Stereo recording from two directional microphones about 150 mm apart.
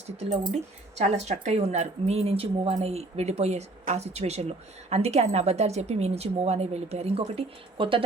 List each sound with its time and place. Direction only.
0.9 s a woman's voice: 50° right (ahead or behind)